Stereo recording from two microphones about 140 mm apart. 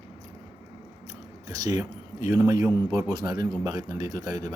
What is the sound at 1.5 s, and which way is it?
Speech, 25° right (ahead or behind).